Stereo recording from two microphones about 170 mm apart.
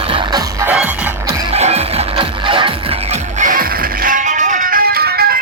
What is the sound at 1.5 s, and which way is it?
Music, 40° right (ahead or behind).